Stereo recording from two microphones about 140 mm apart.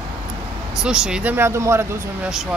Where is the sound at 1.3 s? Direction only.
20° right (ahead or behind).